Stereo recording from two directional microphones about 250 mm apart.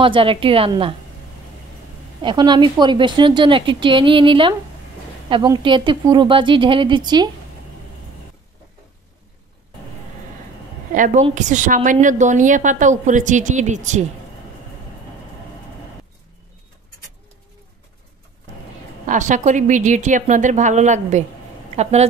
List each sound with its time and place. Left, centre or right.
0.0 s a woman's voice: right
2.2 s a woman's voice: centre
11.0 s a woman's voice: right
19.0 s a woman's voice: right